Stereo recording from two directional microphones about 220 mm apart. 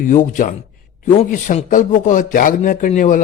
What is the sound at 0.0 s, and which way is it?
A man's voice, 35° left (ahead or behind).